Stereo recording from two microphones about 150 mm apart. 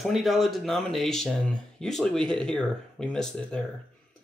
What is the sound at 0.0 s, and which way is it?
Speech, centre (ahead or behind).